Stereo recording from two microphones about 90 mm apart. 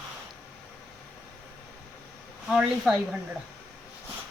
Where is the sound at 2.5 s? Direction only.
5° right (ahead or behind).